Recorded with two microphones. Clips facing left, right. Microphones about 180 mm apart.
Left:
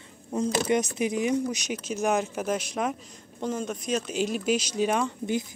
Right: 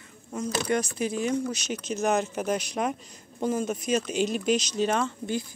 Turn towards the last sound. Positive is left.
turn(degrees=15)  # may be behind; listen again after turning